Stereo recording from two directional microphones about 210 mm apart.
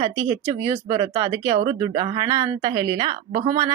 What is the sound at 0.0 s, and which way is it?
A woman's voice, 15° right (ahead or behind).